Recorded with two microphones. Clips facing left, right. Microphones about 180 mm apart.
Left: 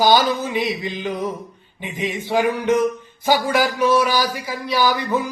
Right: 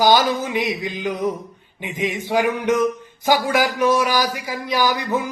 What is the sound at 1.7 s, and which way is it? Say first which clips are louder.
A man's voice: right 1 dB; 15° right (ahead or behind).